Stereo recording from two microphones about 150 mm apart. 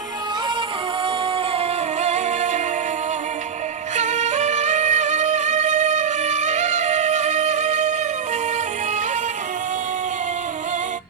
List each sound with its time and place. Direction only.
1.5 s music: 50° right (ahead or behind)
3.9 s music: 50° right (ahead or behind)